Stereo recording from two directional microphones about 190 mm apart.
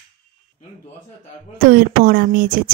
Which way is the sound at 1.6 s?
50° right (ahead or behind).